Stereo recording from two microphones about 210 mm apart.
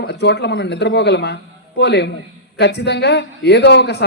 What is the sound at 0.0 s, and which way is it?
A man's voice, 50° left (ahead or behind).